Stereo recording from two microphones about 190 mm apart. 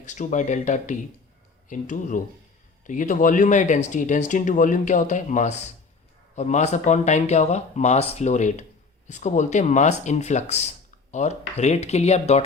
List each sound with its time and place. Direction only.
0.0 s speech: 40° left (ahead or behind)